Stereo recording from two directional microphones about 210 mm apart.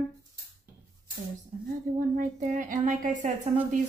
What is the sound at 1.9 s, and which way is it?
Speech, 40° right (ahead or behind).